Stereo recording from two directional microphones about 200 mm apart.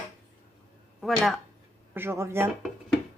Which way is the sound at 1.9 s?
10° right (ahead or behind).